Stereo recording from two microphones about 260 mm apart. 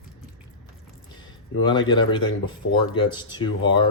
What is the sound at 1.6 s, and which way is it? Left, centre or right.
Speech, centre.